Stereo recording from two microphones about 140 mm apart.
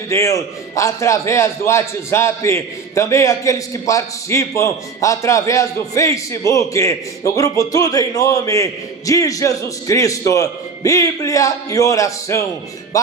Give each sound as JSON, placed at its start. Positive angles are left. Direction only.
{"t": 0.1, "sound": "a man's voice", "side_deg": 20}